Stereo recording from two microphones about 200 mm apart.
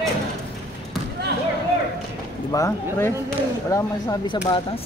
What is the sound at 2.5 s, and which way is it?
Speech, 15° left (ahead or behind).